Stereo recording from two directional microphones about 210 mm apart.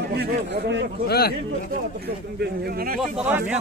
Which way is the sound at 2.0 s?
50° right (ahead or behind).